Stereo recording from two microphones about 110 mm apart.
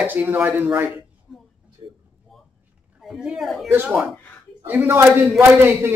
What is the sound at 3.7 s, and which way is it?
A man's voice, 15° right (ahead or behind).